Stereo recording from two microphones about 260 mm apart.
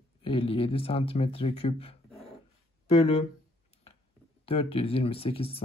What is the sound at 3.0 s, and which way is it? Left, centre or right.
Speech, left.